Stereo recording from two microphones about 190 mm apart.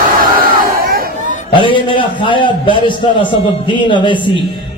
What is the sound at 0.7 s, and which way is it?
Chatter, 50° right (ahead or behind).